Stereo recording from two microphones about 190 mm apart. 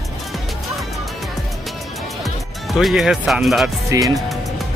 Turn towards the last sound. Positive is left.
turn(degrees=0)  # may be behind; listen again after turning